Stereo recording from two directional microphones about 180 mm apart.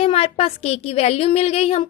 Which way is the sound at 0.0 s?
35° left (ahead or behind).